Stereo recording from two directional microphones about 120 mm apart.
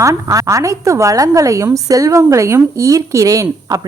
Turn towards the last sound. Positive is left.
turn(degrees=-30)  # may be behind; listen again after turning